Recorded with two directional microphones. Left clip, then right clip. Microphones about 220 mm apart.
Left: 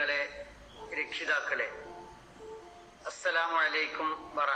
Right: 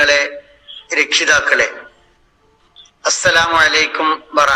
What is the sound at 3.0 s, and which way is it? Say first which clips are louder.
Speech: right 18 dB; 50° right (ahead or behind).